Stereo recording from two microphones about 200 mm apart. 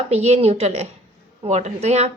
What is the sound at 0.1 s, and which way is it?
A woman's voice, 30° right (ahead or behind).